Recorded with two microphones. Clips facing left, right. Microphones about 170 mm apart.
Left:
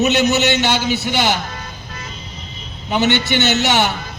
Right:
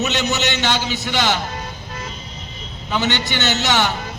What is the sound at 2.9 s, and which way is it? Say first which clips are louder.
A man's voice: left 5 dB; 20° left (ahead or behind).